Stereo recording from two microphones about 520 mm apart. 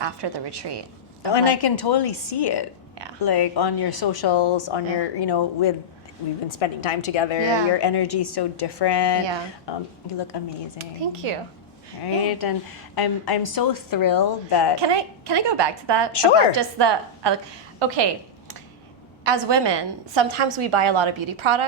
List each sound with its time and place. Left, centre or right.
0.0 s a woman's voice: right
1.3 s speech: left
6.5 s a woman's voice: left
7.4 s a woman's voice: right
7.8 s speech: left
10.8 s speech: right
12.0 s a woman's voice: left
14.8 s a woman's voice: right
19.2 s a woman's voice: right